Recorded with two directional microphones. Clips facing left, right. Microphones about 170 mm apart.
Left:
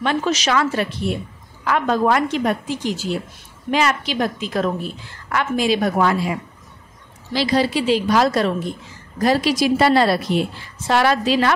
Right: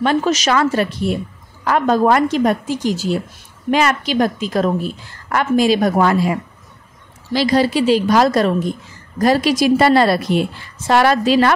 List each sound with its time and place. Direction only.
0.0 s a woman's voice: 40° right (ahead or behind)
7.3 s a woman's voice: 45° right (ahead or behind)